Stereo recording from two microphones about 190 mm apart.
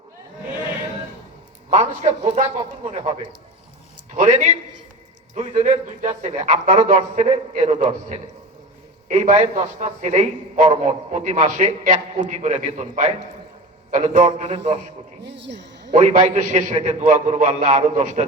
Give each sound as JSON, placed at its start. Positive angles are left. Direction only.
{"t": 1.7, "sound": "a man's voice", "side_deg": -35}
{"t": 4.1, "sound": "a man's voice", "side_deg": -40}
{"t": 15.2, "sound": "speech", "side_deg": -65}
{"t": 15.9, "sound": "a man's voice", "side_deg": -40}